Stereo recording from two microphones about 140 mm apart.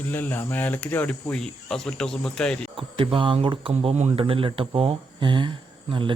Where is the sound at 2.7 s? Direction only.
40° right (ahead or behind).